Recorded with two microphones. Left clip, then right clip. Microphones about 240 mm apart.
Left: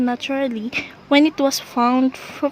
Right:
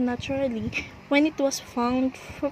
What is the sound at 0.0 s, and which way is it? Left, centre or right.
Speech, left.